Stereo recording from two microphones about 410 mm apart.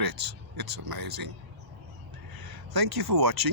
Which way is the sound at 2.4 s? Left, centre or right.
Right.